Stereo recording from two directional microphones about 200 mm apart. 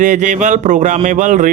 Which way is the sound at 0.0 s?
40° right (ahead or behind).